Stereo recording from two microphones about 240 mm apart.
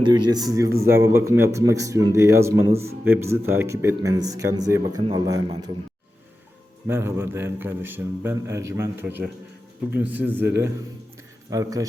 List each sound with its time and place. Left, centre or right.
0.0 s a man's voice: centre
6.8 s a man's voice: centre